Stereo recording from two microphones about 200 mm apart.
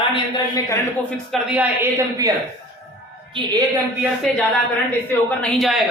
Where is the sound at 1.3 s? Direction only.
5° right (ahead or behind).